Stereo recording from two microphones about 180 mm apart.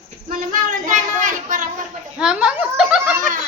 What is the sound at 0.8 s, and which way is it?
Speech, 45° right (ahead or behind).